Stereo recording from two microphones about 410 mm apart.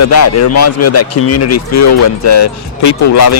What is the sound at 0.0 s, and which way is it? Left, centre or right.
Speech, left.